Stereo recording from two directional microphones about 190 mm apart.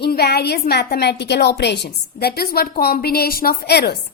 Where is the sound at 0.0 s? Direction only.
60° left (ahead or behind).